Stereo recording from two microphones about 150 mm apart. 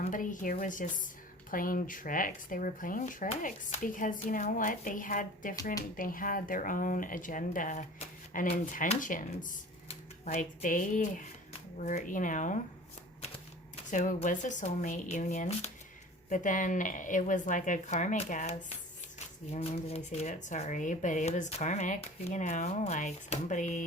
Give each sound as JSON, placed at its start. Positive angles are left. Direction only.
{"t": 0.0, "sound": "a woman's voice", "side_deg": 60}
{"t": 13.9, "sound": "a woman's voice", "side_deg": 55}